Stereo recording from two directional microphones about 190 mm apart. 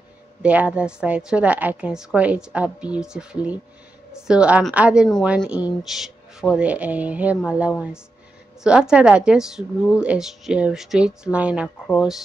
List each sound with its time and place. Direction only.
0.4 s speech: 5° right (ahead or behind)